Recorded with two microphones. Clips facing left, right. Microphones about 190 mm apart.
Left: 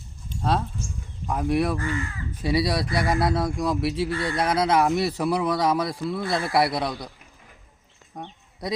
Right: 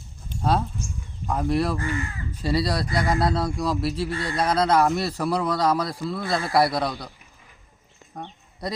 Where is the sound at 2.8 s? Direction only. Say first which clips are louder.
Even; 20° right (ahead or behind).